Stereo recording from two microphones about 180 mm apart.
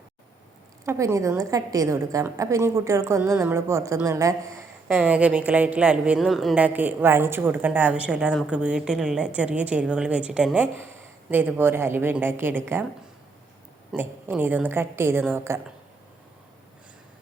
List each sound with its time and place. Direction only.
0.9 s speech: 15° right (ahead or behind)
4.9 s speech: 5° right (ahead or behind)
13.9 s speech: 10° right (ahead or behind)